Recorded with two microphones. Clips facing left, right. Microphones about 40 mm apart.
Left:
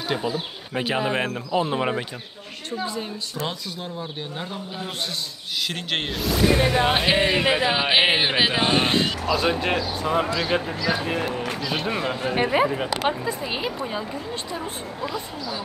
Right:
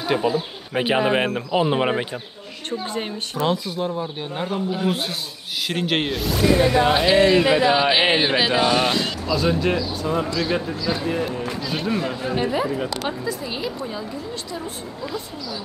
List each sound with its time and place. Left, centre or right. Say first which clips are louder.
0.2 s speech: right 5 dB; right
3.4 s a man's voice: right 13 dB; centre
6.6 s speech: right 3 dB; centre
6.9 s speech: right 4 dB; left
7.5 s speech: right 3 dB; centre
8.5 s a man's voice: right 2 dB; left
12.4 s speech: left 2 dB; left
12.6 s a man's voice: left 2 dB; left